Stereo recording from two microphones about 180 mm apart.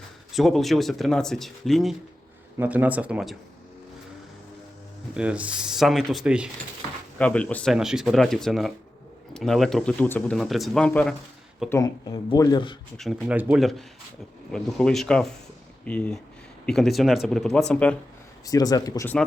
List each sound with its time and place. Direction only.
0.3 s speech: centre (ahead or behind)
5.1 s speech: 5° right (ahead or behind)
7.2 s speech: 5° left (ahead or behind)
11.7 s speech: 20° left (ahead or behind)
13.0 s speech: centre (ahead or behind)
18.4 s speech: 20° left (ahead or behind)